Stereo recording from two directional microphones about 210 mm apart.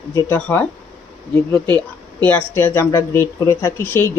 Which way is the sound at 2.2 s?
10° left (ahead or behind).